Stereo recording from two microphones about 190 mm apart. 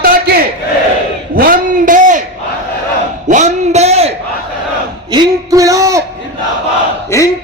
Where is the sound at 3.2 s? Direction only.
40° right (ahead or behind).